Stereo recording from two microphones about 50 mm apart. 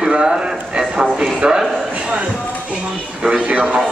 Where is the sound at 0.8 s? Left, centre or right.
Centre.